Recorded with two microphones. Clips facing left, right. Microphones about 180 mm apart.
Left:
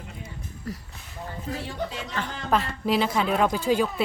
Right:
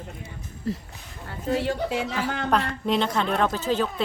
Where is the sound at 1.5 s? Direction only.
80° right.